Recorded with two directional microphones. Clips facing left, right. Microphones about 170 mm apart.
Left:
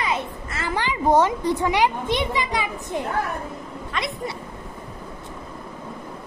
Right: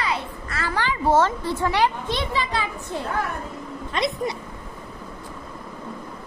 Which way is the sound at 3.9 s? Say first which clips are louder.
Right 4 dB; 25° right (ahead or behind).